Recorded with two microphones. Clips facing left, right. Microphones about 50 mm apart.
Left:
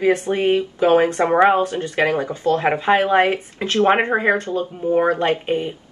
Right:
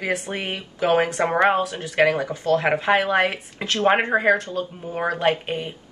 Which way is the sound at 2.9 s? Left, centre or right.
Left.